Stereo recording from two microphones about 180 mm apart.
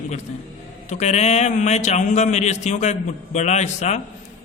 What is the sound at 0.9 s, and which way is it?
A man's voice, 40° left (ahead or behind).